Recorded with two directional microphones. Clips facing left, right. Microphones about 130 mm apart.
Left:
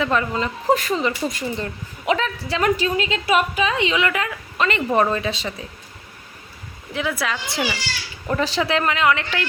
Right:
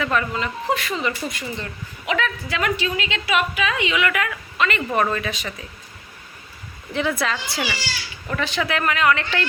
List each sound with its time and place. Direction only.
0.0 s a woman's voice: 25° left (ahead or behind)
6.9 s speech: 10° left (ahead or behind)
7.5 s a woman's voice: 20° left (ahead or behind)
8.3 s a woman's voice: 35° left (ahead or behind); by 9.5 s 15° left (ahead or behind)